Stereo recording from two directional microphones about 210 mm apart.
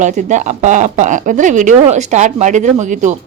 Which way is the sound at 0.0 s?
35° right (ahead or behind).